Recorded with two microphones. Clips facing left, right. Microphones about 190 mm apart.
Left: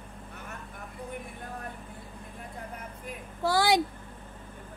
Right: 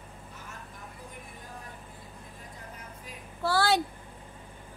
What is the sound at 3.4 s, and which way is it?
Speech, 15° left (ahead or behind).